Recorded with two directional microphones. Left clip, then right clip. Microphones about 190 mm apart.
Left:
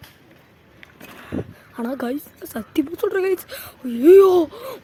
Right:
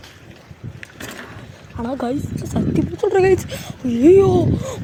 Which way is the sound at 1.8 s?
25° left (ahead or behind).